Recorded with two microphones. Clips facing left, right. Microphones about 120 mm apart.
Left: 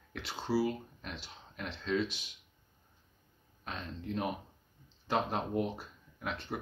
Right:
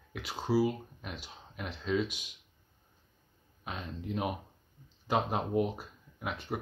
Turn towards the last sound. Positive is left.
turn(degrees=-10)  # may be behind; listen again after turning